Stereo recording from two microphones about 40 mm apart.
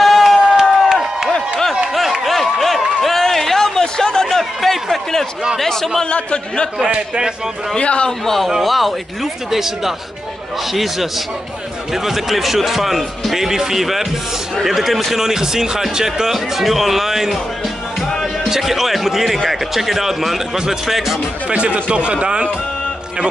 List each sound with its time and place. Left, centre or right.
0.0 s crowd: centre
0.6 s crowd: centre
2.2 s a sound: centre
5.6 s a man's voice: centre
6.0 s a man's voice: left
6.8 s a man's voice: right
7.7 s a man's voice: left
8.6 s speech: centre
15.1 s speech: centre
18.5 s speech: centre
21.5 s a man's voice: right